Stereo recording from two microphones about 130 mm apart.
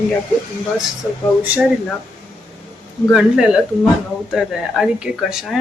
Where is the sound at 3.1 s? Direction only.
5° right (ahead or behind).